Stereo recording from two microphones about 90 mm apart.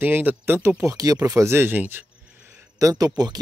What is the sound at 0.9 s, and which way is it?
Speech, 45° right (ahead or behind).